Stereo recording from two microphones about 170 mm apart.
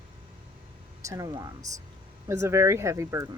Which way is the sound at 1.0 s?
20° right (ahead or behind).